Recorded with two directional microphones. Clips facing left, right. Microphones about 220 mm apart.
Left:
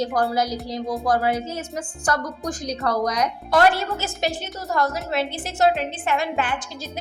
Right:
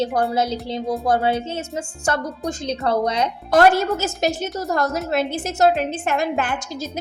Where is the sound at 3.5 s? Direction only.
45° right (ahead or behind).